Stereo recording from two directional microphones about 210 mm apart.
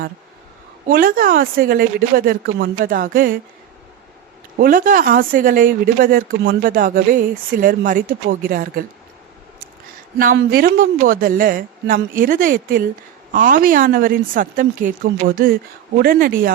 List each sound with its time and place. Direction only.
0.9 s speech: 45° right (ahead or behind)
4.5 s speech: 40° right (ahead or behind)
10.3 s speech: 45° right (ahead or behind)